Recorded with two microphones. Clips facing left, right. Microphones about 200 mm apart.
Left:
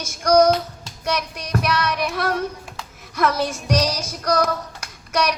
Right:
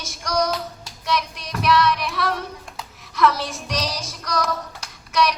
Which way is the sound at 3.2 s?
45° left (ahead or behind).